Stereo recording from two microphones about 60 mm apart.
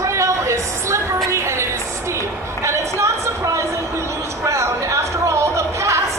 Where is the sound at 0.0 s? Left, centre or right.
Right.